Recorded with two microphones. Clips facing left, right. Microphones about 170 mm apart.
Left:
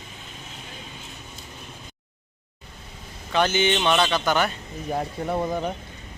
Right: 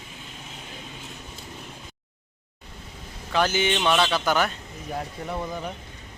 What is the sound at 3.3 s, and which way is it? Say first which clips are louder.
Speech: left 2 dB; centre (ahead or behind).